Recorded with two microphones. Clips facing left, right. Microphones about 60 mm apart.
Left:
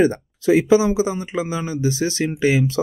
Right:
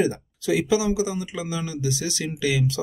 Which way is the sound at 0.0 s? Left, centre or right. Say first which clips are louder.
Left 6 dB; left.